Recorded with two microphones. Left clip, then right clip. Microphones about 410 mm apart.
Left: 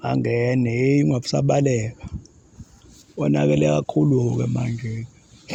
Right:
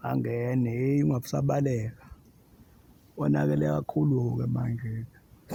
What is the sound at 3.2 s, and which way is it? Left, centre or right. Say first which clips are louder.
Speech: left 8 dB; right.